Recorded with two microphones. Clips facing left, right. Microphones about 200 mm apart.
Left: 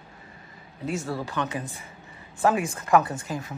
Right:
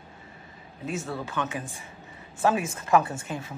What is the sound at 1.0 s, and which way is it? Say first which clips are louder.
Speech: left 2 dB; centre (ahead or behind).